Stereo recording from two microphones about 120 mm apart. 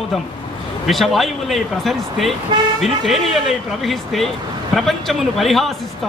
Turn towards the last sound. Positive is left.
turn(degrees=0)  # may be behind; listen again after turning